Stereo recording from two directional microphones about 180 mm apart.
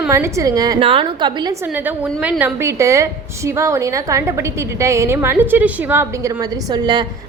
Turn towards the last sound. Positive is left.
turn(degrees=-20)  # may be behind; listen again after turning